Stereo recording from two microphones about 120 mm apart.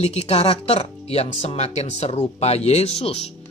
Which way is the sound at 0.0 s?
60° left (ahead or behind).